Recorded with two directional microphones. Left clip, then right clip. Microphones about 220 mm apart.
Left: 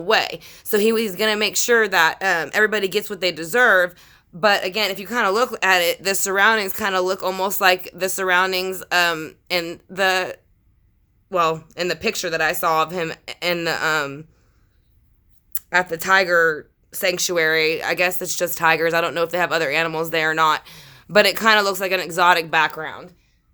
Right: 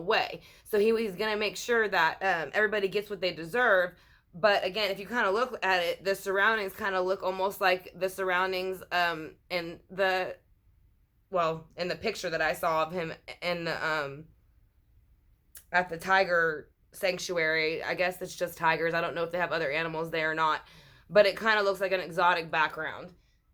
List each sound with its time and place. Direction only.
0.0 s speech: 45° left (ahead or behind)
15.5 s speech: 50° left (ahead or behind); by 23.0 s 35° left (ahead or behind)